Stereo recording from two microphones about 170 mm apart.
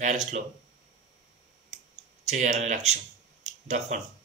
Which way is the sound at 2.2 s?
45° right (ahead or behind).